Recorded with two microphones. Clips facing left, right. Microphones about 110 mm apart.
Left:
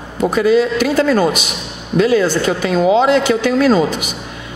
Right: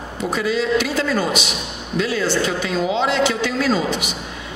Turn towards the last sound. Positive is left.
turn(degrees=45)  # may be behind; listen again after turning